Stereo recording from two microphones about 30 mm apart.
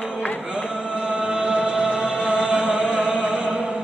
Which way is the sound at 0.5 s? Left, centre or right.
Right.